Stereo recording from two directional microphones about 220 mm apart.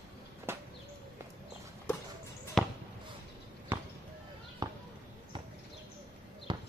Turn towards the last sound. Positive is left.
turn(degrees=-20)  # may be behind; listen again after turning